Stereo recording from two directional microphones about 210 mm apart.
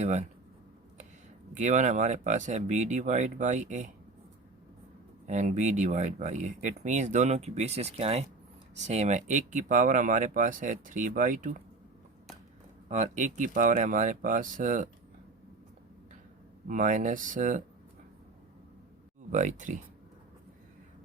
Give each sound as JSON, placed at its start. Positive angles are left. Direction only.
{"t": 0.0, "sound": "speech", "side_deg": -35}
{"t": 1.5, "sound": "speech", "side_deg": -35}
{"t": 5.3, "sound": "speech", "side_deg": -35}
{"t": 12.9, "sound": "speech", "side_deg": -35}
{"t": 16.6, "sound": "speech", "side_deg": -40}
{"t": 19.3, "sound": "speech", "side_deg": -35}